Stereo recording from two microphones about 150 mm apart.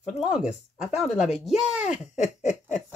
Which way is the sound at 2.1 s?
50° left (ahead or behind).